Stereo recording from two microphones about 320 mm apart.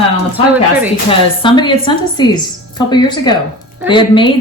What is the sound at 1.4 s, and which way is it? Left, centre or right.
Speech, centre.